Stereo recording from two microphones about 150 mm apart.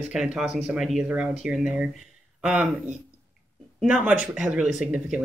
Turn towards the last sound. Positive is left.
turn(degrees=-5)  # may be behind; listen again after turning